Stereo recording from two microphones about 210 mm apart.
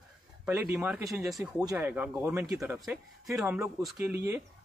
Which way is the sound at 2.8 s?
Centre (ahead or behind).